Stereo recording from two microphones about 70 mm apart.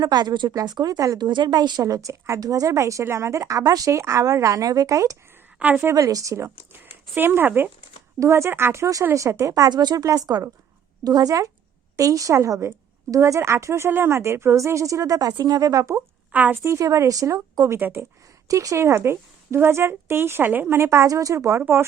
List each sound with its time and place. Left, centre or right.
0.0 s speech: right
1.2 s speech: right
3.6 s speech: right
7.2 s a woman's voice: right
8.2 s a woman's voice: right
9.1 s speech: right
9.6 s speech: right
10.1 s speech: right
16.3 s a woman's voice: right
16.6 s a woman's voice: right